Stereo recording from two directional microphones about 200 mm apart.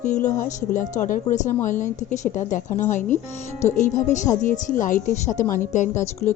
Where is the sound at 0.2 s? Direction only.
40° left (ahead or behind).